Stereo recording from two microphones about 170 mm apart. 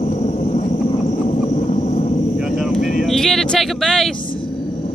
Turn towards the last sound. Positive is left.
turn(degrees=0)  # may be behind; listen again after turning